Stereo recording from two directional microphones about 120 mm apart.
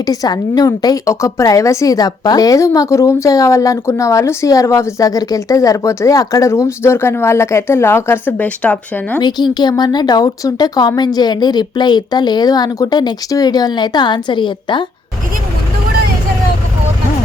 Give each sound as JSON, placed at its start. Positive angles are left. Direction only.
{"t": 0.0, "sound": "a woman's voice", "side_deg": 30}
{"t": 9.2, "sound": "a woman's voice", "side_deg": 35}